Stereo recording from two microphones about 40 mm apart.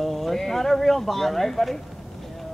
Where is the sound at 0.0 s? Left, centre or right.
Centre.